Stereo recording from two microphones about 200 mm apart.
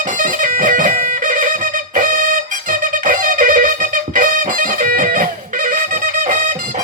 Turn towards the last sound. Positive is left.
turn(degrees=-40)  # may be behind; listen again after turning